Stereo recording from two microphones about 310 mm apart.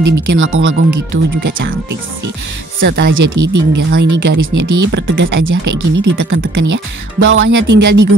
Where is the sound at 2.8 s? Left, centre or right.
Right.